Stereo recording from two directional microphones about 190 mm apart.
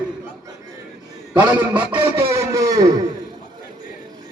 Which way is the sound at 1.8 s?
25° right (ahead or behind).